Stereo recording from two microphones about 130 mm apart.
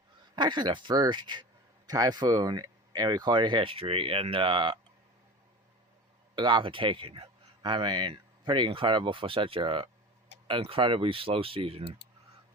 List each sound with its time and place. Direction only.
0.3 s speech: 35° right (ahead or behind)
6.3 s speech: 40° right (ahead or behind)